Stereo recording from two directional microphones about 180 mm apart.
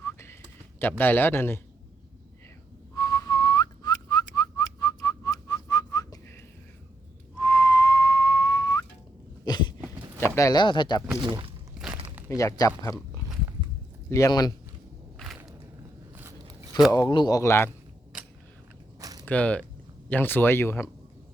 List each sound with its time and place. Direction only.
0.0 s typing: 15° left (ahead or behind)
0.8 s speech: 10° left (ahead or behind)
2.9 s whistling: 15° left (ahead or behind)
9.4 s a sound: 25° left (ahead or behind)
10.2 s speech: 15° left (ahead or behind)
11.3 s speech: 25° right (ahead or behind)
12.4 s speech: 20° left (ahead or behind)
14.1 s speech: 20° left (ahead or behind)
16.1 s a sound: 15° right (ahead or behind)
16.9 s speech: 25° left (ahead or behind)
18.9 s a sound: 20° right (ahead or behind)
19.2 s speech: 10° left (ahead or behind)